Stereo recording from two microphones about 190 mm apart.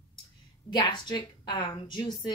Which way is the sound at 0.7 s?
25° left (ahead or behind).